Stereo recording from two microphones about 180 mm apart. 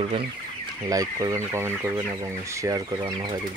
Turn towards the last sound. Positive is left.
turn(degrees=-20)  # may be behind; listen again after turning